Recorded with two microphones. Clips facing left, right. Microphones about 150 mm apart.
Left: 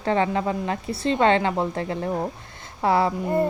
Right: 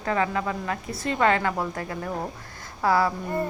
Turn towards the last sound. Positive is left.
turn(degrees=25)  # may be behind; listen again after turning